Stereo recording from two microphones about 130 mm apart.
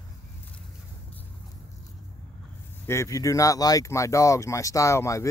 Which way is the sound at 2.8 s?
20° left (ahead or behind).